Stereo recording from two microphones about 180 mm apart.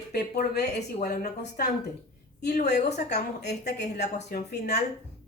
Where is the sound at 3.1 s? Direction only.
65° left (ahead or behind).